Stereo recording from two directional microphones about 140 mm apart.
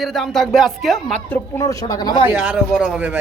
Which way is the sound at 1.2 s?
20° left (ahead or behind).